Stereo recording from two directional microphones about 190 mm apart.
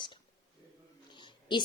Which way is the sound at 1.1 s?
25° left (ahead or behind).